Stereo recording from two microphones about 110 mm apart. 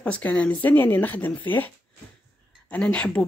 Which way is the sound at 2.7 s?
10° left (ahead or behind).